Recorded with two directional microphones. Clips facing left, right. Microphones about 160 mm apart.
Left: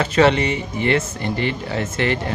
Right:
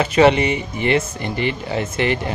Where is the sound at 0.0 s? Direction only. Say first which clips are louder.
Right 2 dB; 15° right (ahead or behind).